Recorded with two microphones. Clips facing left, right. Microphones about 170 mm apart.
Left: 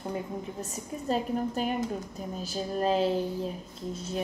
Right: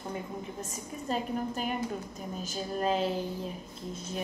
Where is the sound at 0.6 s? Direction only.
40° left (ahead or behind).